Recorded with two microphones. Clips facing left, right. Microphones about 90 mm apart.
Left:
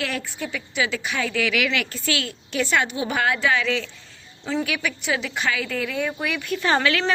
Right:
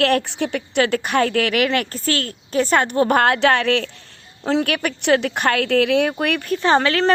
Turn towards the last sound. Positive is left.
turn(degrees=-35)  # may be behind; listen again after turning